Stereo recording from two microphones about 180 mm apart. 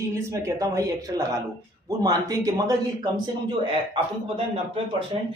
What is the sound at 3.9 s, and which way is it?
Speech, 30° right (ahead or behind).